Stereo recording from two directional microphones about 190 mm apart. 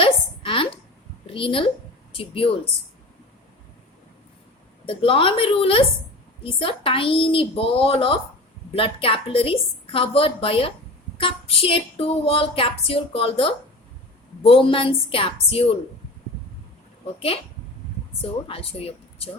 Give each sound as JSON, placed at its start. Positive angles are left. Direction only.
{"t": 0.0, "sound": "a sound", "side_deg": 30}
{"t": 1.3, "sound": "a woman's voice", "side_deg": 30}
{"t": 4.9, "sound": "a woman's voice", "side_deg": 30}
{"t": 18.2, "sound": "a woman's voice", "side_deg": 30}